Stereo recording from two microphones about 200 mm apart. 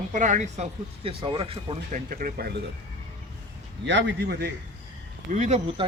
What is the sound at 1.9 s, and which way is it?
Speech, 45° right (ahead or behind).